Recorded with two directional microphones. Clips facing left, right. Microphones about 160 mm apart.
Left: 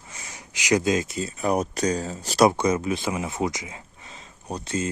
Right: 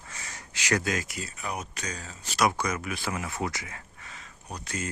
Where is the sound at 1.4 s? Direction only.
40° left (ahead or behind).